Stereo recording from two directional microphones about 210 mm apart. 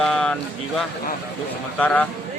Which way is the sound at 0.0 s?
5° left (ahead or behind).